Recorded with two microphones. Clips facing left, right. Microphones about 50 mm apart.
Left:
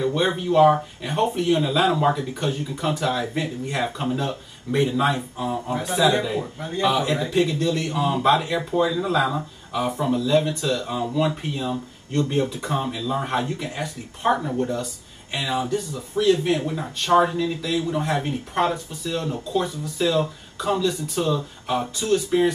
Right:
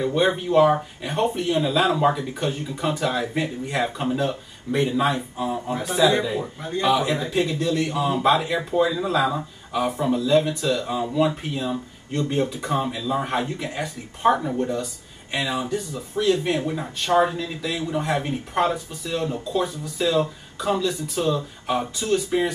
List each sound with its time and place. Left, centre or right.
0.0 s speech: centre